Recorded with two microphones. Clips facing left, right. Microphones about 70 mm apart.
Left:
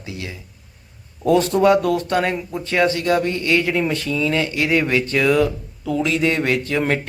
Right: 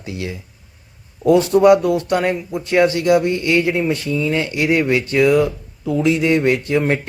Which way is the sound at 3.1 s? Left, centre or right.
Right.